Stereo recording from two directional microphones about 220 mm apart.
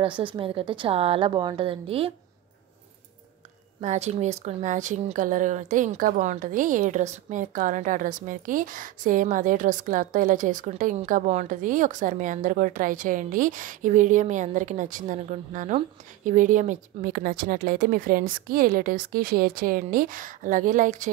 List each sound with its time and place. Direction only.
0.0 s a woman's voice: 20° right (ahead or behind)
3.8 s a woman's voice: 30° right (ahead or behind)